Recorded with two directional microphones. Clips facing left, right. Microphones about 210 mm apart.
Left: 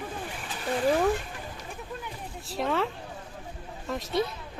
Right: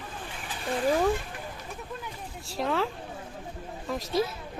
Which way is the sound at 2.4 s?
Centre (ahead or behind).